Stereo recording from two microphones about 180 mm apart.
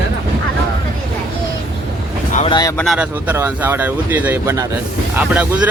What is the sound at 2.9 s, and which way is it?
Speech, 10° right (ahead or behind).